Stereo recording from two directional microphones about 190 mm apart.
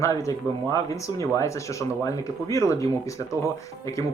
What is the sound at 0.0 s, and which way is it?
Speech, 15° left (ahead or behind).